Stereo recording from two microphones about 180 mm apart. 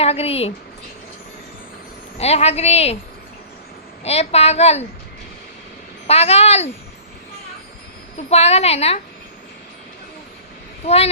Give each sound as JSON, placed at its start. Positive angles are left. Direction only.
{"t": 0.0, "sound": "speech", "side_deg": 35}
{"t": 2.1, "sound": "speech", "side_deg": 35}
{"t": 4.0, "sound": "speech", "side_deg": 35}
{"t": 6.1, "sound": "speech", "side_deg": 35}
{"t": 8.1, "sound": "speech", "side_deg": 35}
{"t": 10.8, "sound": "speech", "side_deg": 35}